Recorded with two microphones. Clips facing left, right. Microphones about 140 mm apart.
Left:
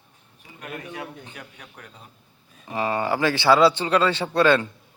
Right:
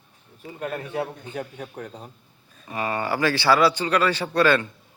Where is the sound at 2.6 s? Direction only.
20° left (ahead or behind).